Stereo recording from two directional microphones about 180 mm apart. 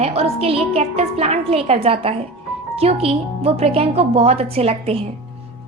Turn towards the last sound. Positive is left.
turn(degrees=-35)  # may be behind; listen again after turning